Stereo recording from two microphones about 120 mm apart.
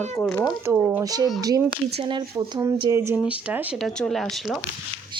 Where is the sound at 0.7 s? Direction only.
20° right (ahead or behind).